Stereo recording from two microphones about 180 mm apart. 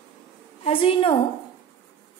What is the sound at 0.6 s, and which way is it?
Speech, 30° left (ahead or behind).